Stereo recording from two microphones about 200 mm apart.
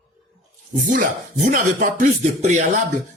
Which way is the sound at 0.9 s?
40° right (ahead or behind).